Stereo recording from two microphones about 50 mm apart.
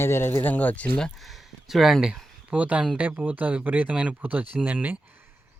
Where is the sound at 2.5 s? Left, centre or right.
Right.